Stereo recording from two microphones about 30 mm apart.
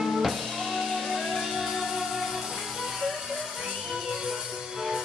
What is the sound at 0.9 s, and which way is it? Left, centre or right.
Music, centre.